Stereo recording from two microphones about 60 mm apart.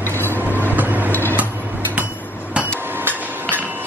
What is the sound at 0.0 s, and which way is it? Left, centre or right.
Vehicle, left.